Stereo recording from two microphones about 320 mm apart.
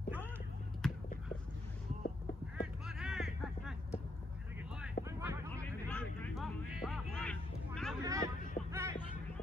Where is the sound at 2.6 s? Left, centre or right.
Centre.